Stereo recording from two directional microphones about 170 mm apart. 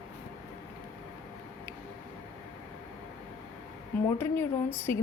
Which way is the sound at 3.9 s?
10° left (ahead or behind).